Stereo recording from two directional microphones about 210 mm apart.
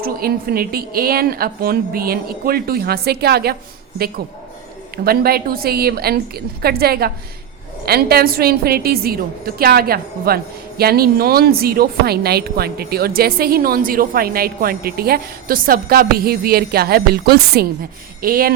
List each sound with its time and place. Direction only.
0.0 s a woman's voice: 45° right (ahead or behind)